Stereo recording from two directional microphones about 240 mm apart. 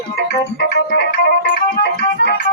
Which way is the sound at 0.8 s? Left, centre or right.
Left.